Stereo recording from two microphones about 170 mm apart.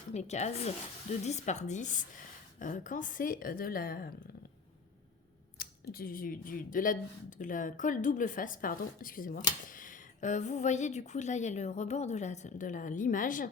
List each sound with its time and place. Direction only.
0.1 s a woman's voice: 40° left (ahead or behind); by 4.1 s 60° left (ahead or behind)
5.5 s speech: 60° left (ahead or behind)